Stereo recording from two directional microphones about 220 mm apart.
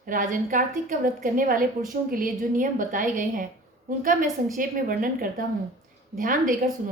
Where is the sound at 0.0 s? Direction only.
35° right (ahead or behind).